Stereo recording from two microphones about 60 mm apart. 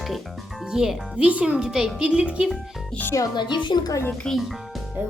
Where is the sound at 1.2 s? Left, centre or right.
Right.